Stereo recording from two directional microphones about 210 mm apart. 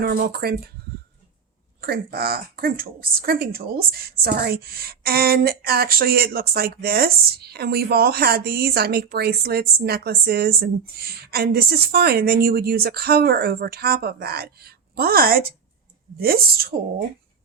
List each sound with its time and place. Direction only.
0.0 s speech: 50° right (ahead or behind)
1.8 s speech: 45° right (ahead or behind)